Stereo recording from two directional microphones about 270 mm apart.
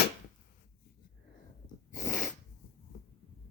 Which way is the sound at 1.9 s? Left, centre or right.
Left.